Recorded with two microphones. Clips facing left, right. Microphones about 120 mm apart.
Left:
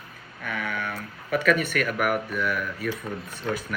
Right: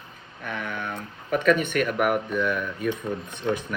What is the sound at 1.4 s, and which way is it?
Speech, 30° right (ahead or behind).